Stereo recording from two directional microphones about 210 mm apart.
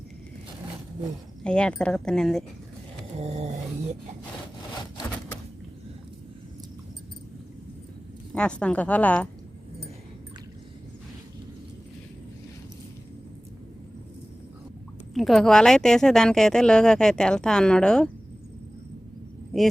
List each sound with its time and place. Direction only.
1.5 s a woman's voice: 5° left (ahead or behind)
3.2 s a sound: 30° right (ahead or behind)
8.3 s a woman's voice: 5° left (ahead or behind)
15.1 s a woman's voice: centre (ahead or behind)